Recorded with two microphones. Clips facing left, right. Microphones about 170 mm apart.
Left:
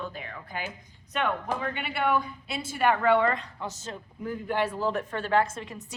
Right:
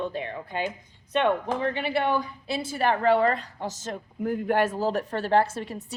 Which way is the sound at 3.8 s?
50° right (ahead or behind).